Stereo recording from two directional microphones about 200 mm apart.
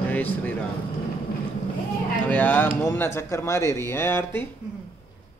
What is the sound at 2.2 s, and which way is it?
Speech, 10° left (ahead or behind).